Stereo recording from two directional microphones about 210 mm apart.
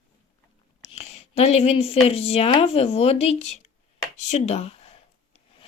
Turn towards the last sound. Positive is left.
turn(degrees=30)  # may be behind; listen again after turning